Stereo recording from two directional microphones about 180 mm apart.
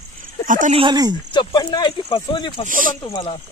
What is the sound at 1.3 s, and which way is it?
Speech, 25° left (ahead or behind).